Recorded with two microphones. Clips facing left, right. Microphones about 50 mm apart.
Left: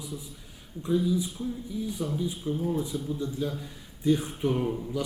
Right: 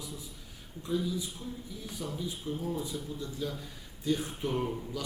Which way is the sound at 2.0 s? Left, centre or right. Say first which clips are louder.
Left 3 dB; centre.